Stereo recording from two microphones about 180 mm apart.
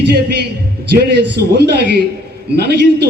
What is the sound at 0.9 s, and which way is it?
A man's voice, 65° right (ahead or behind).